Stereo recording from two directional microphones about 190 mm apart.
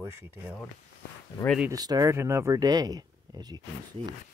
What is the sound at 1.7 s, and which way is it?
Speech, 20° right (ahead or behind).